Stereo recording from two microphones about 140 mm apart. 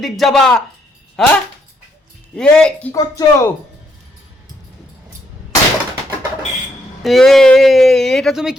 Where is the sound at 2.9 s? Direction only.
25° left (ahead or behind).